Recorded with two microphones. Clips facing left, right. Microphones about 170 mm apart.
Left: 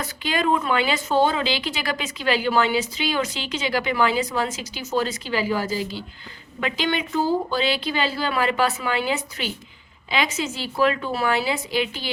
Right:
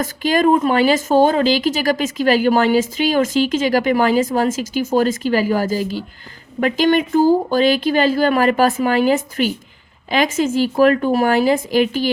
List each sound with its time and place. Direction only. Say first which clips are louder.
0.0 s a woman's voice: right 8 dB; 45° right (ahead or behind)